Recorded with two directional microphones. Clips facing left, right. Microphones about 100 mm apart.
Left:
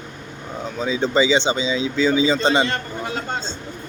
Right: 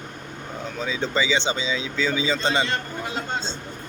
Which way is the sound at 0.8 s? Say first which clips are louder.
Left 6 dB; 20° left (ahead or behind).